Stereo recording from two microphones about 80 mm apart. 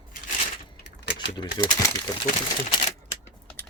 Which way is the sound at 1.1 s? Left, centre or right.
Left.